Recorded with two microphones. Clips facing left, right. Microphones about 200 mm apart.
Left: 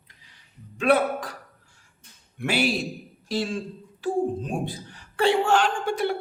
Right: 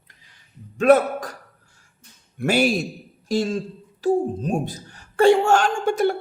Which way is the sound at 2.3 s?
45° right (ahead or behind).